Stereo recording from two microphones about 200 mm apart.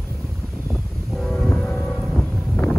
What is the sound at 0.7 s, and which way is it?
Train, centre (ahead or behind).